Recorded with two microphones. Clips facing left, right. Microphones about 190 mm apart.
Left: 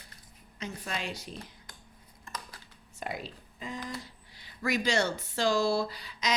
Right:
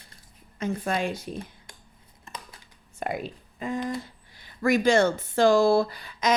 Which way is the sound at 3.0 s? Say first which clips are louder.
Right 7 dB; 55° right (ahead or behind).